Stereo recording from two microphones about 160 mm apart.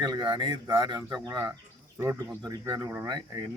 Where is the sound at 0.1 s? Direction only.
30° right (ahead or behind).